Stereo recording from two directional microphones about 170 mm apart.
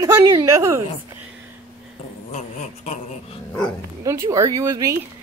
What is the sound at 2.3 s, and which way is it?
Dog, 45° left (ahead or behind).